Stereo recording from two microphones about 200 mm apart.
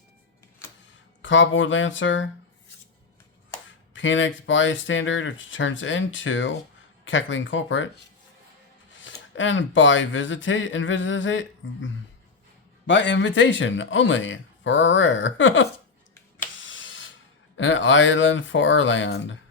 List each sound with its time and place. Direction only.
1.2 s speech: 70° left (ahead or behind)
3.9 s speech: 70° left (ahead or behind)
9.0 s speech: 70° left (ahead or behind)
12.9 s speech: 65° left (ahead or behind)
16.6 s a sound: 70° left (ahead or behind)
17.6 s speech: 70° left (ahead or behind)